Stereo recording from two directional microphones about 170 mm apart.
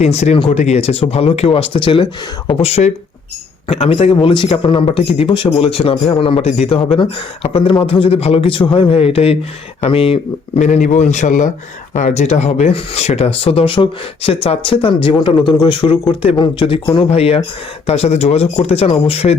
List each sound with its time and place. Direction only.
0.0 s speech: 40° left (ahead or behind)